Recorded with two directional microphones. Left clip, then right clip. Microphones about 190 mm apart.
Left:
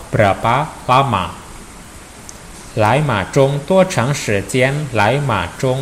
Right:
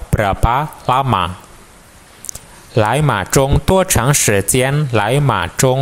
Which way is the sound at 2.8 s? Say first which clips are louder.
Even; 50° right (ahead or behind).